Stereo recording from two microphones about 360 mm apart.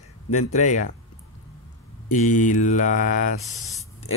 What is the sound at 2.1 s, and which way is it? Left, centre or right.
Speech, left.